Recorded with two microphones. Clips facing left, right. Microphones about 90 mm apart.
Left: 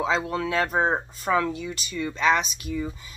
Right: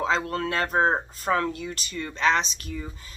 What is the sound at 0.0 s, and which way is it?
Speech, 5° left (ahead or behind).